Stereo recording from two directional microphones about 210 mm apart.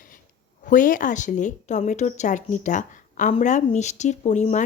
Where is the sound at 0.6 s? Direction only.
40° left (ahead or behind).